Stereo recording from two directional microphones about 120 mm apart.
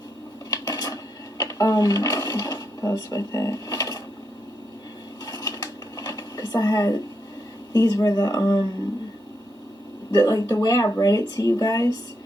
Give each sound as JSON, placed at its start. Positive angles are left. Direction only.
{"t": 0.5, "sound": "cutlery", "side_deg": 30}
{"t": 1.4, "sound": "a sound", "side_deg": 30}
{"t": 5.2, "sound": "dishes", "side_deg": 30}
{"t": 7.7, "sound": "speech", "side_deg": 30}
{"t": 10.2, "sound": "speech", "side_deg": 30}